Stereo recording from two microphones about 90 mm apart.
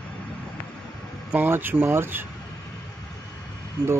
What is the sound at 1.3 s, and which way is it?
Speech, 20° right (ahead or behind).